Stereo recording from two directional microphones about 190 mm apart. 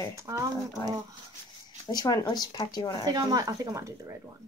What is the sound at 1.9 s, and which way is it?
Speech, 20° left (ahead or behind).